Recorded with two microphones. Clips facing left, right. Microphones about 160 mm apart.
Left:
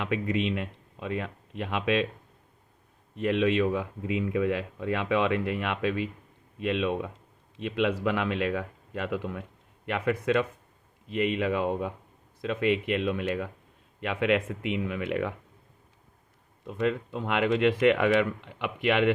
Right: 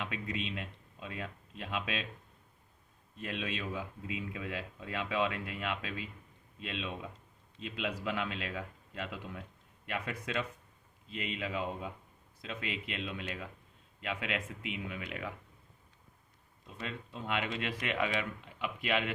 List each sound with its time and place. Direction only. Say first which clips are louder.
0.0 s speech: left 10 dB; 65° left (ahead or behind)
3.2 s speech: left 14 dB; 70° left (ahead or behind)
12.4 s speech: left 14 dB; 60° left (ahead or behind)
16.6 s speech: left 15 dB; 65° left (ahead or behind)